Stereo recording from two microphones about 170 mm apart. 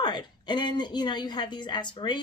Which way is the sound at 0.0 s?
25° left (ahead or behind).